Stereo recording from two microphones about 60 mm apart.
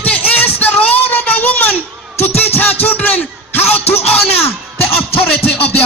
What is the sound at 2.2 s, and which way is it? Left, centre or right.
A man's voice, left.